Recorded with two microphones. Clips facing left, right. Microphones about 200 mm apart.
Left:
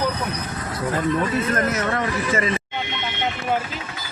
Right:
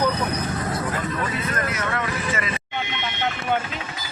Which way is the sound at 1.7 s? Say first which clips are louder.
Left 4 dB; 35° left (ahead or behind).